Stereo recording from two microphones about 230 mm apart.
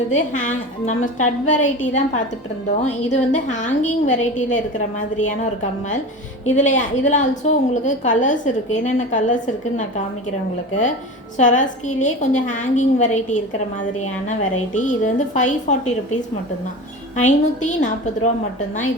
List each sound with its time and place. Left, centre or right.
0.1 s a woman's voice: left
6.4 s a woman's voice: left
11.3 s a woman's voice: left
17.2 s a woman's voice: left